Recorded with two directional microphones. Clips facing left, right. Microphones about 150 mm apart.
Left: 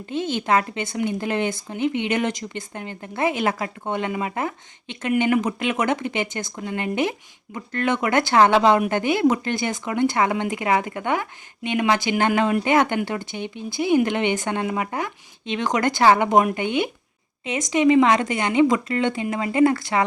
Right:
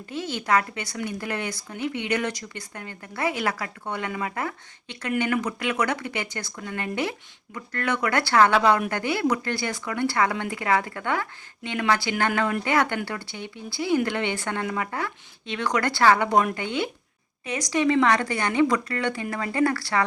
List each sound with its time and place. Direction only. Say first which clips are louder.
0.0 s speech: left 5 dB; 20° left (ahead or behind)